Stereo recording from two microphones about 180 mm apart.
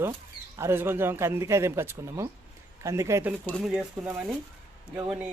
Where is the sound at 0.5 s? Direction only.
15° right (ahead or behind).